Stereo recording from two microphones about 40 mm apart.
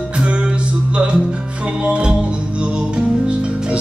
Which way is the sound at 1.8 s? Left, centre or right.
Right.